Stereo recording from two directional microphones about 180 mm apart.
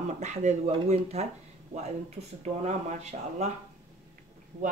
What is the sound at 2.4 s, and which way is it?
Speech, 40° right (ahead or behind).